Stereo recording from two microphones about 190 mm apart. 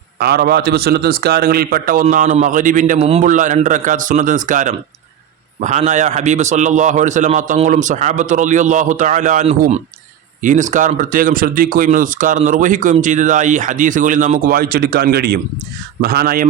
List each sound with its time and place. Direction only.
0.2 s a man's voice: 55° right (ahead or behind)